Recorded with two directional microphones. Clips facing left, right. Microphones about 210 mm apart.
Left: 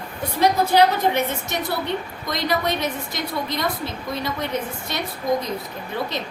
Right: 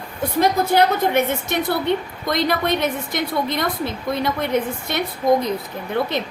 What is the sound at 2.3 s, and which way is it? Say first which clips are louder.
A woman's voice: right 3 dB; 55° right (ahead or behind).